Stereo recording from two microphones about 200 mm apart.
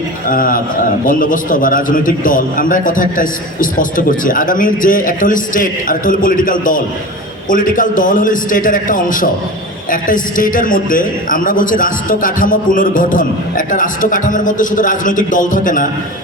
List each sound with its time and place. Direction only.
0.3 s a man's voice: 45° left (ahead or behind)